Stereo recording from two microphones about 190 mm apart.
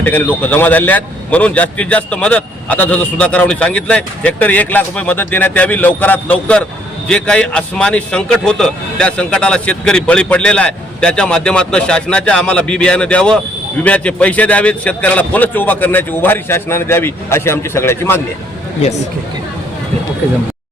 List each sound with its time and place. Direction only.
0.0 s a man's voice: 10° left (ahead or behind)